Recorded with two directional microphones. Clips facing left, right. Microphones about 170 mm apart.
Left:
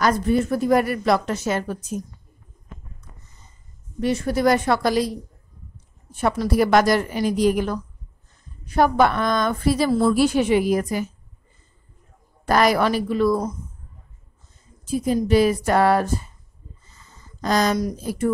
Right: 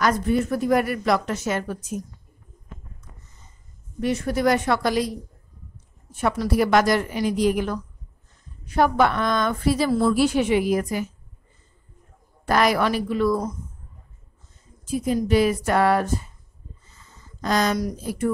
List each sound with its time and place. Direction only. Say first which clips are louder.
0.0 s a woman's voice: left 2 dB; 30° left (ahead or behind)
4.0 s a woman's voice: left 2 dB; 30° left (ahead or behind)
6.2 s a woman's voice: left 2 dB; 30° left (ahead or behind)
9.8 s a woman's voice: left 2 dB; 25° left (ahead or behind)
10.1 s a woman's voice: left 2 dB; 40° left (ahead or behind)
12.4 s a woman's voice: left 2 dB; 40° left (ahead or behind)
14.9 s a woman's voice: left 2 dB; 35° left (ahead or behind)
17.4 s speech: left 2 dB; 35° left (ahead or behind)